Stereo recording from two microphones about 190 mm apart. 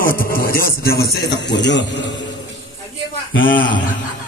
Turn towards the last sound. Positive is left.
turn(degrees=45)  # may be behind; listen again after turning